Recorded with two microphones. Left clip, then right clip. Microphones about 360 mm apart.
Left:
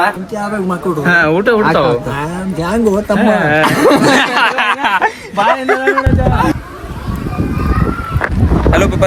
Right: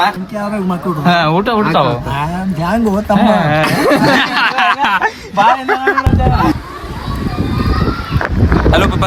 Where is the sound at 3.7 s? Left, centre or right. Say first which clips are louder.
Left 2 dB; centre.